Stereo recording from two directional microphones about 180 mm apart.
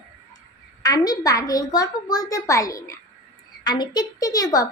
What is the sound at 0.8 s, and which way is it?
A child's voice, 20° left (ahead or behind).